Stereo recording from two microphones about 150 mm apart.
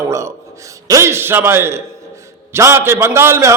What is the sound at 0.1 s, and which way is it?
A man's voice, 20° right (ahead or behind).